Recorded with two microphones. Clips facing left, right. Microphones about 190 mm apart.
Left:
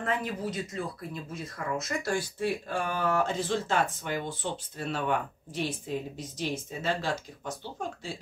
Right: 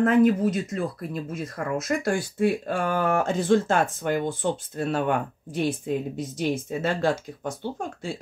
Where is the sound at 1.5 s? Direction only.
55° right (ahead or behind).